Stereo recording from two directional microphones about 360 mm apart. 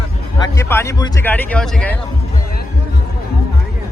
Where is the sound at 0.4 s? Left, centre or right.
Centre.